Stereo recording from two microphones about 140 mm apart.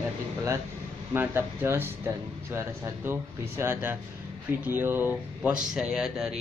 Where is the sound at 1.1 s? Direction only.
15° right (ahead or behind).